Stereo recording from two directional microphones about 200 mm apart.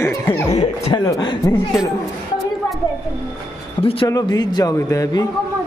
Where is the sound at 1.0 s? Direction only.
20° left (ahead or behind).